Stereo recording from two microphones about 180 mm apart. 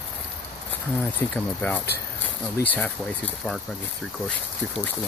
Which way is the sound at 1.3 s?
10° left (ahead or behind).